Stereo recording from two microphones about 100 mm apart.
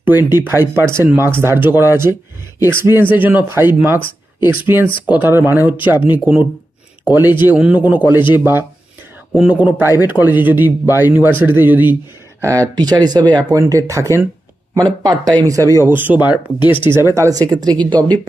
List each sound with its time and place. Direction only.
0.3 s a man's voice: 20° right (ahead or behind)
12.4 s a man's voice: 30° right (ahead or behind); by 16.4 s 15° right (ahead or behind)
16.6 s speech: 55° left (ahead or behind)
16.9 s speech: 25° right (ahead or behind); by 17.7 s 40° right (ahead or behind)